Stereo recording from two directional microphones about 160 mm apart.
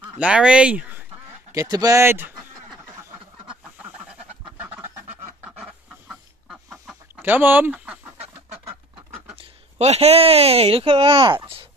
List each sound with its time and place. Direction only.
0.2 s speech: 5° right (ahead or behind)
1.5 s speech: 20° right (ahead or behind)
3.0 s duck: 10° right (ahead or behind)
5.4 s chicken: 5° right (ahead or behind)
7.2 s speech: 10° right (ahead or behind)
9.4 s speech: 40° right (ahead or behind)